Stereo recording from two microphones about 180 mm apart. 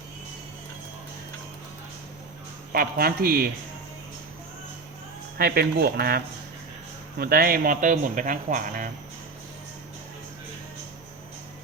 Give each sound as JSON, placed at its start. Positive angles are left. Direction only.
{"t": 2.7, "sound": "speech", "side_deg": -55}
{"t": 5.4, "sound": "speech", "side_deg": -60}